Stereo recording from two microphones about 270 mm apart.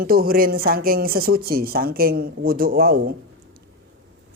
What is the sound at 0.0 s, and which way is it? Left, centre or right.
Speech, right.